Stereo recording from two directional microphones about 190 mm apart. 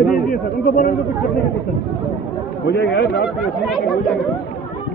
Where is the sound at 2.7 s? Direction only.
55° left (ahead or behind).